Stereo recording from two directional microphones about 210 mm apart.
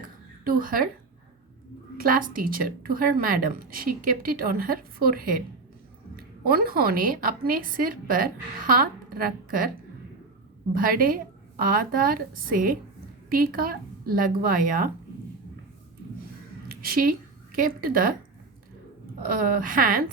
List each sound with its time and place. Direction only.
0.4 s a woman's voice: 40° right (ahead or behind)
2.0 s speech: 40° right (ahead or behind)
6.4 s speech: 45° right (ahead or behind)
10.8 s a woman's voice: 40° right (ahead or behind)
16.6 s a woman's voice: 45° right (ahead or behind)
19.2 s speech: 40° right (ahead or behind)